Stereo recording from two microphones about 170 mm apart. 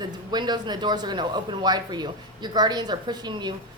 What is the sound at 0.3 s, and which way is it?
A woman's voice, 25° right (ahead or behind).